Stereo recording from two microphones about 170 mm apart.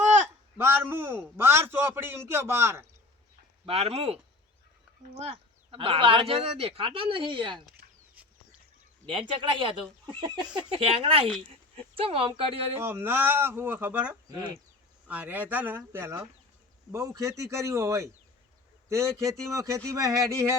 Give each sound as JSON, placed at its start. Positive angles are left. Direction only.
{"t": 0.0, "sound": "a sound", "side_deg": -45}
{"t": 0.5, "sound": "a man's voice", "side_deg": -15}
{"t": 3.7, "sound": "speech", "side_deg": -35}
{"t": 5.2, "sound": "speech", "side_deg": -35}
{"t": 9.0, "sound": "speech", "side_deg": -30}
{"t": 12.8, "sound": "a man's voice", "side_deg": -15}
{"t": 14.3, "sound": "speech", "side_deg": -20}
{"t": 15.0, "sound": "a man's voice", "side_deg": -10}